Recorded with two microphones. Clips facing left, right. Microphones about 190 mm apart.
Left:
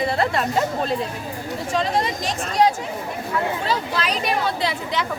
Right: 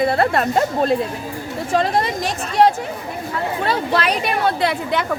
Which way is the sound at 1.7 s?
60° right (ahead or behind).